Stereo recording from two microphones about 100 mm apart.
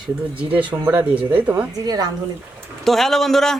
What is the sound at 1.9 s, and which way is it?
Speech, 40° right (ahead or behind).